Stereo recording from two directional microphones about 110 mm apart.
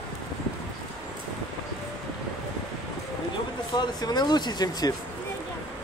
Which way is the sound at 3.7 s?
40° left (ahead or behind).